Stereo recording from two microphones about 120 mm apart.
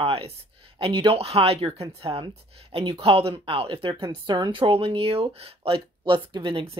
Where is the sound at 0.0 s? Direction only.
55° right (ahead or behind).